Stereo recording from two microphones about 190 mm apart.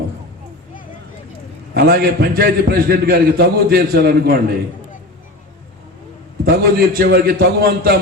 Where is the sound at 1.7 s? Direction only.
55° right (ahead or behind).